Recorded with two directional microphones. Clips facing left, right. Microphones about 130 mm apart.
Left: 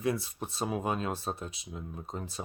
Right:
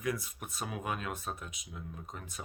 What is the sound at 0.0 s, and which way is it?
Speech, 30° left (ahead or behind).